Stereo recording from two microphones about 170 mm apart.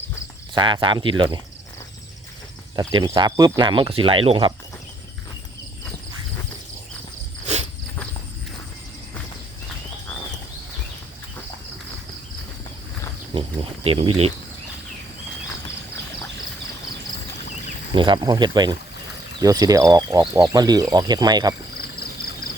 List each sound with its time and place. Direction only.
0.5 s speech: 30° right (ahead or behind)
2.7 s speech: 25° right (ahead or behind)
7.4 s walk: 40° right (ahead or behind)
13.8 s speech: 35° right (ahead or behind)
17.9 s speech: 25° right (ahead or behind)